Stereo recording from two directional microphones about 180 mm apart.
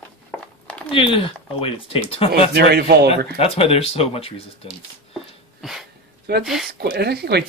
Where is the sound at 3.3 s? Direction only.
35° left (ahead or behind).